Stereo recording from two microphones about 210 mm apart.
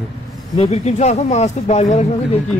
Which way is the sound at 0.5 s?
30° left (ahead or behind).